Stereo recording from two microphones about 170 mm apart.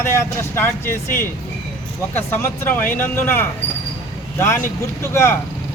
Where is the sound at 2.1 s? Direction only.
15° left (ahead or behind).